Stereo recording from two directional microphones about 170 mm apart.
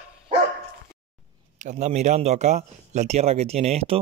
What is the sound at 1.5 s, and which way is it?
A man's voice, 45° right (ahead or behind).